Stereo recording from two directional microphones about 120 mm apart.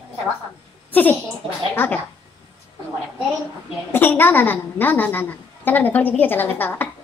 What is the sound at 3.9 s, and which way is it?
A woman's voice, 15° left (ahead or behind).